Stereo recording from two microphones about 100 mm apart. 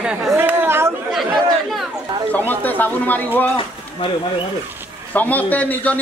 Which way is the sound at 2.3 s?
15° left (ahead or behind).